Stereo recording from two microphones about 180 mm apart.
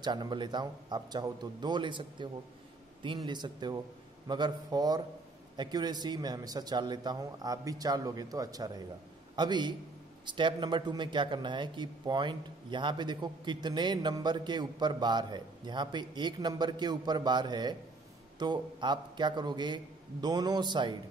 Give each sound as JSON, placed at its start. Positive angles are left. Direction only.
{"t": 0.0, "sound": "a man's voice", "side_deg": -25}